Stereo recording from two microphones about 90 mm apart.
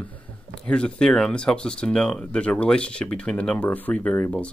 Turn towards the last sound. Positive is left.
turn(degrees=15)  # may be behind; listen again after turning